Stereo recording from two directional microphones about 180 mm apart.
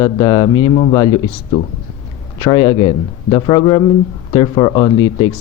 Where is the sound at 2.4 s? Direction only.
25° left (ahead or behind).